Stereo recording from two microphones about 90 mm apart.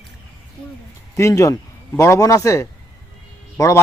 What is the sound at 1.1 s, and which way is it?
A man's voice, 35° left (ahead or behind).